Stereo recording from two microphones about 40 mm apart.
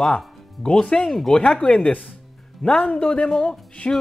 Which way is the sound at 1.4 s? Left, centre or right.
Left.